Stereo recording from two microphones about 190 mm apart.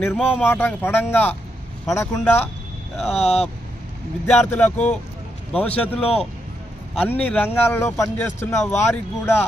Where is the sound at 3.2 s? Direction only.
35° left (ahead or behind).